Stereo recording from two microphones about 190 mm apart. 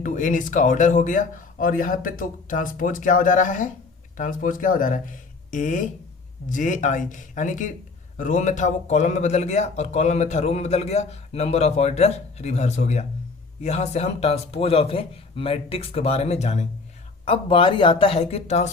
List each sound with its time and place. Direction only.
0.0 s speech: 40° left (ahead or behind)